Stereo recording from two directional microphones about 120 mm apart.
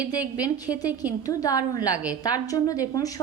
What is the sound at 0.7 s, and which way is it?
A woman's voice, 35° left (ahead or behind).